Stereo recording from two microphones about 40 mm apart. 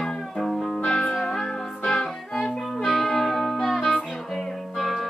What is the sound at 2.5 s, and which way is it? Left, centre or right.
Music, centre.